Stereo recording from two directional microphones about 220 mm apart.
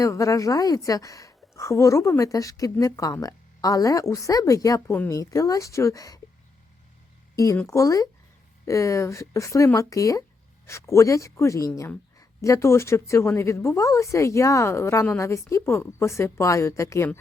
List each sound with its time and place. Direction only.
0.0 s a woman's voice: 15° left (ahead or behind)
7.3 s a woman's voice: 10° left (ahead or behind)